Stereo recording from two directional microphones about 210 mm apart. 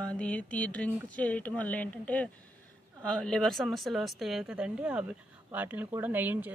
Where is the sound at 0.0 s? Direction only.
5° left (ahead or behind).